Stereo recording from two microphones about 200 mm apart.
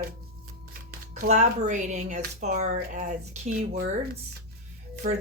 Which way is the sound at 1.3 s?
35° right (ahead or behind).